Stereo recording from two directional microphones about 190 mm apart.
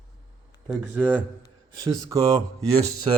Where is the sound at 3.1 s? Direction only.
30° right (ahead or behind).